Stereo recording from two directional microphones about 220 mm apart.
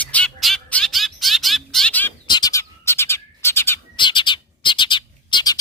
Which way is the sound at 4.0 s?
20° left (ahead or behind).